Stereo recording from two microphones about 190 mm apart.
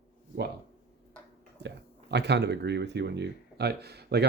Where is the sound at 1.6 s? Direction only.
65° right (ahead or behind).